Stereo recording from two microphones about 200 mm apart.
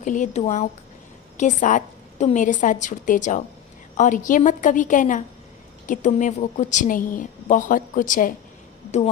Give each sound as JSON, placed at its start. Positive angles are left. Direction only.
{"t": 0.0, "sound": "a woman's voice", "side_deg": 40}